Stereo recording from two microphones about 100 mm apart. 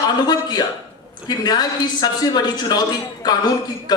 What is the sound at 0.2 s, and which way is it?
A man's voice, 45° left (ahead or behind).